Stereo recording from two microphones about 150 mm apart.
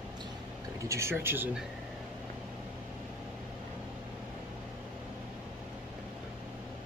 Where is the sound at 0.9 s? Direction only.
15° right (ahead or behind).